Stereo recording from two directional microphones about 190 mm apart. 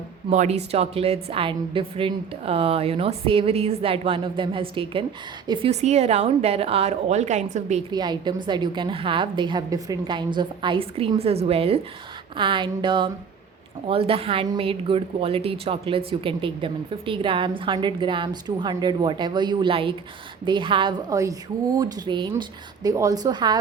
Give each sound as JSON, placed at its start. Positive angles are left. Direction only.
{"t": 0.3, "sound": "a woman's voice", "side_deg": -35}
{"t": 7.9, "sound": "a woman's voice", "side_deg": -25}